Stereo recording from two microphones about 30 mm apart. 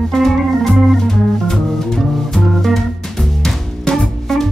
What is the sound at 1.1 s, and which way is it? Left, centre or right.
Music, centre.